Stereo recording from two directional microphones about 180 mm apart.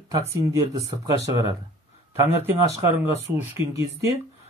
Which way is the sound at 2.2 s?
15° right (ahead or behind).